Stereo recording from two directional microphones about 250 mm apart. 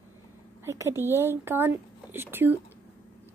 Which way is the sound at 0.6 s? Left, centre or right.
Centre.